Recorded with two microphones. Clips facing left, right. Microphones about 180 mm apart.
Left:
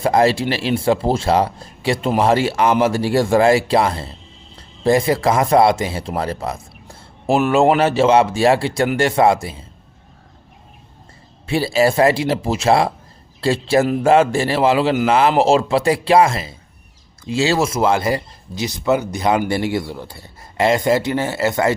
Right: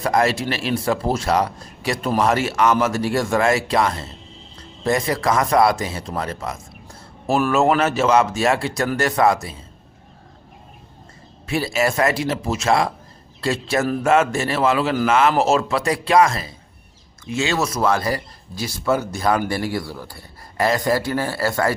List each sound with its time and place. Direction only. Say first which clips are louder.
0.0 s speech: left 4 dB; 30° left (ahead or behind)
11.4 s speech: left 5 dB; 30° left (ahead or behind)